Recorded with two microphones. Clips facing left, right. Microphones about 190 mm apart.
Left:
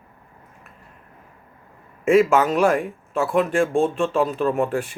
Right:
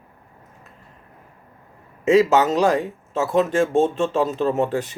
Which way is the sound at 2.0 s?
20° right (ahead or behind).